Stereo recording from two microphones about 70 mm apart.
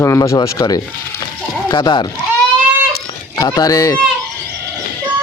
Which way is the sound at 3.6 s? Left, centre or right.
Left.